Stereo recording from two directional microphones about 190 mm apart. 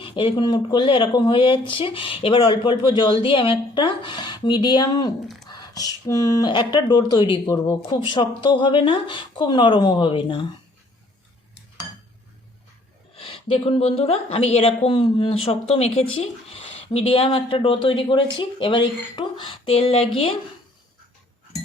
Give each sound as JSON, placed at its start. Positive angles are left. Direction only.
{"t": 0.0, "sound": "speech", "side_deg": 30}
{"t": 13.1, "sound": "a woman's voice", "side_deg": 30}